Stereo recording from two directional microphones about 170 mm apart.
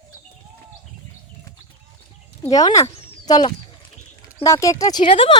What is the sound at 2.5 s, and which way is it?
Speech, 20° left (ahead or behind).